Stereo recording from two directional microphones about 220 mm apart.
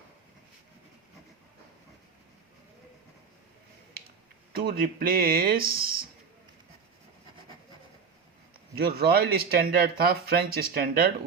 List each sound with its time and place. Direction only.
4.5 s speech: 40° right (ahead or behind)
8.7 s speech: 45° right (ahead or behind)